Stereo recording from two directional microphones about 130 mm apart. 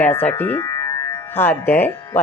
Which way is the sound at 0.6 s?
25° left (ahead or behind).